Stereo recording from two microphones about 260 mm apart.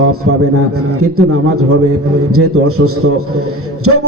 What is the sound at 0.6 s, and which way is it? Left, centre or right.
Speech, right.